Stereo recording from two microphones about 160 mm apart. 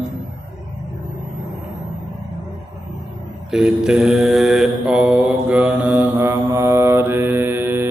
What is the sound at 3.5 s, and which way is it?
Mantra, 5° right (ahead or behind).